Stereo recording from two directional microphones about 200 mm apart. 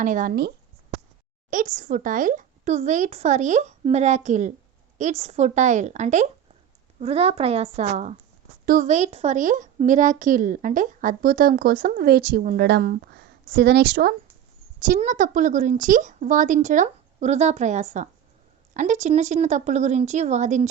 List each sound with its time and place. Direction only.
0.0 s a woman's voice: 40° right (ahead or behind)
12.6 s a woman's voice: 50° right (ahead or behind)
14.8 s speech: 40° right (ahead or behind)